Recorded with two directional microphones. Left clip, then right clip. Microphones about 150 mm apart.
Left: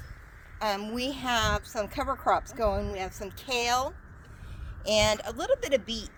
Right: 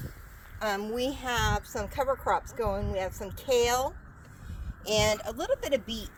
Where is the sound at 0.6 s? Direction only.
45° left (ahead or behind).